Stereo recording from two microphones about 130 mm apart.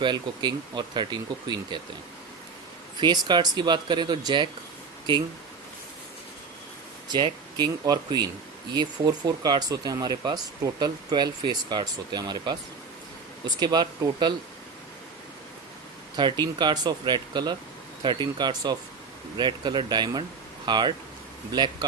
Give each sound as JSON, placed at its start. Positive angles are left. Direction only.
{"t": 0.0, "sound": "speech", "side_deg": -35}
{"t": 3.0, "sound": "speech", "side_deg": -35}
{"t": 7.1, "sound": "speech", "side_deg": -35}
{"t": 16.1, "sound": "speech", "side_deg": -35}